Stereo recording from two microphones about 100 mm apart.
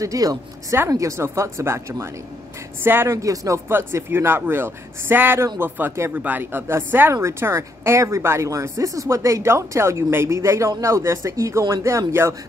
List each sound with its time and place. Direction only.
0.0 s speech: 35° right (ahead or behind)